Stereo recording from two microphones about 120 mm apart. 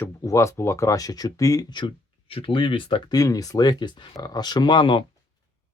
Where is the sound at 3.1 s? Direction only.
30° left (ahead or behind).